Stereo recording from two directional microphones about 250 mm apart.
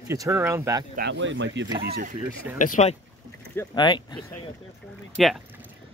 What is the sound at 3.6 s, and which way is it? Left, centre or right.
Speech, centre.